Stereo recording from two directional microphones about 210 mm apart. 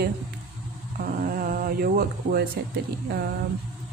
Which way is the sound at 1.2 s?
40° right (ahead or behind).